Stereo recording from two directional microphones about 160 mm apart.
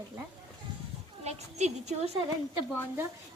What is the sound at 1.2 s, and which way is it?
Speech, 45° right (ahead or behind).